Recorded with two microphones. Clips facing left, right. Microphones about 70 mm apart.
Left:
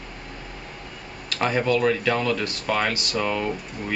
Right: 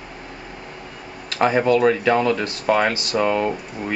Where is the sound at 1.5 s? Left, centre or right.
Centre.